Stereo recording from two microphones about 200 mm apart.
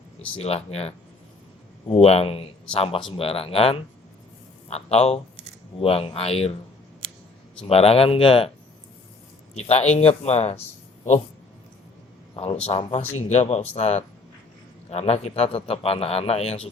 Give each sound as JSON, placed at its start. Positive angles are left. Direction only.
{"t": 0.3, "sound": "a man's voice", "side_deg": 30}
{"t": 7.7, "sound": "a man's voice", "side_deg": 30}
{"t": 9.6, "sound": "speech", "side_deg": 30}
{"t": 12.6, "sound": "a man's voice", "side_deg": 30}